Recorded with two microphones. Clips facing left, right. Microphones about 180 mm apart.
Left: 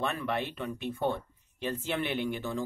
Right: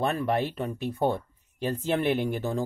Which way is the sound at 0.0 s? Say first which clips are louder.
Right 6 dB; 40° right (ahead or behind).